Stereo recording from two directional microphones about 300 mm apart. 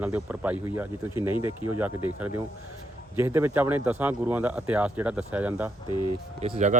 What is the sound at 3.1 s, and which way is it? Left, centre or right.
Speech, centre.